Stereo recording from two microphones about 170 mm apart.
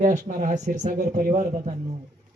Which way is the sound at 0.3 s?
45° right (ahead or behind).